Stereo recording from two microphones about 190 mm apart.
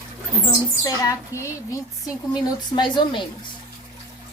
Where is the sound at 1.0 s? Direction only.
15° left (ahead or behind).